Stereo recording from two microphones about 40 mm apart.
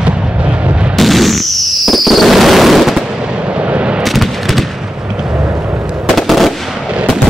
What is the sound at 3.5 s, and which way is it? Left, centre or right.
Artillery fire, right.